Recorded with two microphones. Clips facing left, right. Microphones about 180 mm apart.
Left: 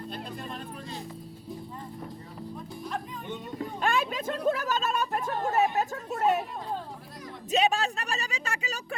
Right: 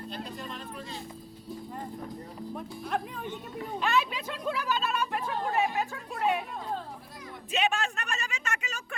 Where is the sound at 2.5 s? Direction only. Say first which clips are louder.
Right 3 dB; 60° right (ahead or behind).